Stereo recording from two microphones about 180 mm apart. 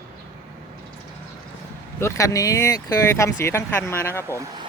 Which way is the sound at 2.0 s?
15° left (ahead or behind).